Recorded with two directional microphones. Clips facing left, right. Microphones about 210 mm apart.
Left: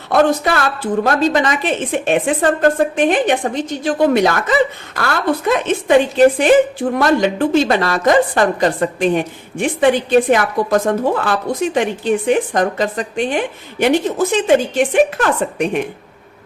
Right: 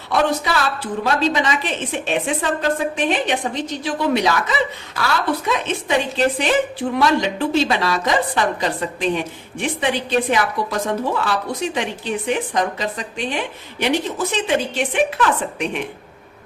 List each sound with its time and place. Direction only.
0.1 s a woman's voice: 50° left (ahead or behind)